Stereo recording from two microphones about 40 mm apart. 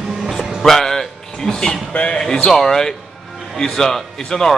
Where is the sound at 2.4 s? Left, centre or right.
Centre.